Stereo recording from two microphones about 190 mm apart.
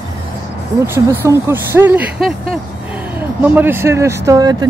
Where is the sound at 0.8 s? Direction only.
10° right (ahead or behind).